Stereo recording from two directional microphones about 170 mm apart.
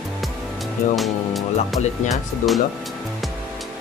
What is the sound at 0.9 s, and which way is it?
Speech, centre (ahead or behind).